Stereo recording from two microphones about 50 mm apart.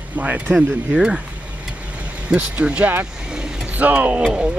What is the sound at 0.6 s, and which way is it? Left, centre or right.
Speech, centre.